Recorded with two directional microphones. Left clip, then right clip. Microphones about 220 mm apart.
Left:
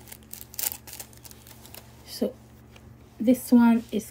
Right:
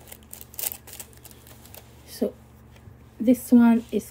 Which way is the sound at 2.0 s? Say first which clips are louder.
Right 1 dB; centre (ahead or behind).